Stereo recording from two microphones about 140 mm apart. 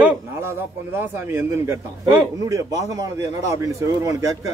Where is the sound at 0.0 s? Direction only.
15° right (ahead or behind).